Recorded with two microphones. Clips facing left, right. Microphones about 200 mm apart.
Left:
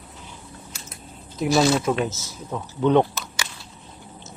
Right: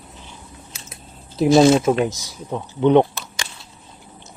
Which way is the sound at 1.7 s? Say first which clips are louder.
Right 5 dB; 25° right (ahead or behind).